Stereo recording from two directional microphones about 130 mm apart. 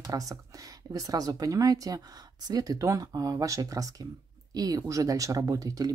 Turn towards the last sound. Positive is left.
turn(degrees=-30)  # may be behind; listen again after turning